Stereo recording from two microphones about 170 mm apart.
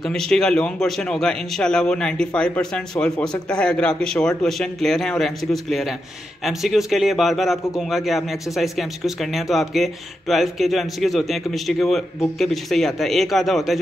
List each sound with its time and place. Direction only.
0.0 s a man's voice: 5° left (ahead or behind)